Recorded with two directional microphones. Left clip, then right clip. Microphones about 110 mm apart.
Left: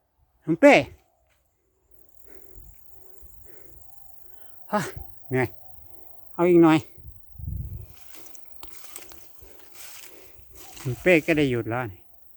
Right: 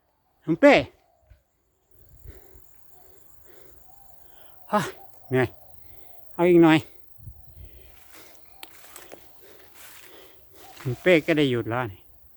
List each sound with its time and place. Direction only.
0.6 s speech: 25° left (ahead or behind)
3.5 s bird: 15° left (ahead or behind)
4.4 s a sound: 5° left (ahead or behind)
6.3 s speech: 5° left (ahead or behind)
8.6 s a sound: 5° right (ahead or behind)
11.0 s speech: 10° left (ahead or behind)